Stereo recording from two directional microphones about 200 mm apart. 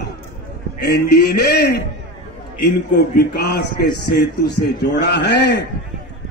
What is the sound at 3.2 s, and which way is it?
A man's voice, 55° left (ahead or behind).